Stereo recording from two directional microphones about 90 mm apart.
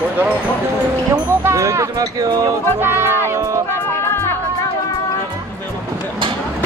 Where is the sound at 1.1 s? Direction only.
30° right (ahead or behind); by 2.5 s 45° right (ahead or behind).